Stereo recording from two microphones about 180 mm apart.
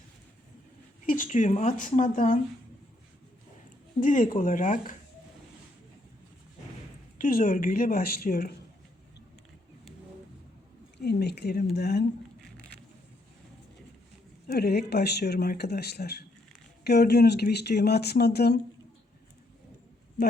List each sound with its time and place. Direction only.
1.0 s speech: 45° left (ahead or behind)
4.0 s speech: 50° left (ahead or behind)
7.2 s speech: 50° left (ahead or behind)
11.0 s speech: 65° left (ahead or behind)
14.4 s speech: 60° left (ahead or behind)